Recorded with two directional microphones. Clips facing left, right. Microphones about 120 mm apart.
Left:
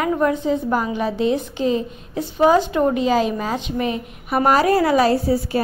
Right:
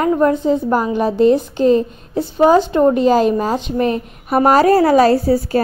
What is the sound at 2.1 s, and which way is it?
Speech, 30° right (ahead or behind).